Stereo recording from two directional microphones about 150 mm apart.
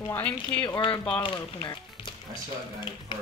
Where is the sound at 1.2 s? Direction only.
35° left (ahead or behind).